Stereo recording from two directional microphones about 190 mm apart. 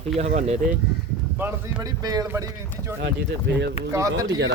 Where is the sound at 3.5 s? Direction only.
65° right (ahead or behind).